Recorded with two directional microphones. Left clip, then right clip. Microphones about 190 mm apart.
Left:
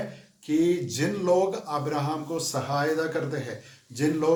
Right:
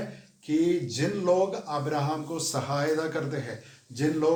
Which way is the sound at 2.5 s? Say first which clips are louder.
Left 1 dB; 5° left (ahead or behind).